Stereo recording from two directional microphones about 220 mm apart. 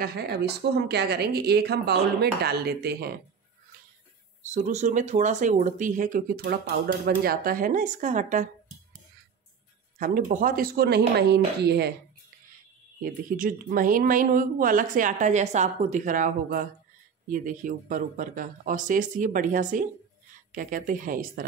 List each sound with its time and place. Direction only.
0.0 s speech: 50° right (ahead or behind)
4.4 s speech: 30° right (ahead or behind)
9.9 s speech: 35° right (ahead or behind)
13.0 s speech: 40° right (ahead or behind)